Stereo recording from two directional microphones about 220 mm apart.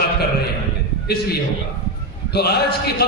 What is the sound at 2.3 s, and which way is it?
Speech, 45° left (ahead or behind).